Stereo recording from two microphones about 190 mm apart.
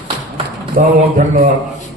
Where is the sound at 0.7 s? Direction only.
45° right (ahead or behind).